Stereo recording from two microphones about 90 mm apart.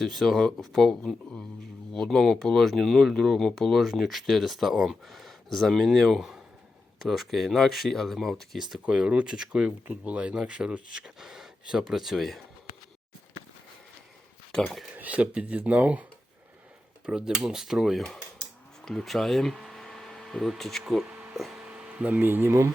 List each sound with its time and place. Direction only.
0.0 s speech: centre (ahead or behind)
14.6 s speech: centre (ahead or behind)
14.9 s speech: 15° right (ahead or behind)
17.1 s speech: 10° right (ahead or behind)
21.3 s a sound: centre (ahead or behind)
21.6 s speech: 15° right (ahead or behind)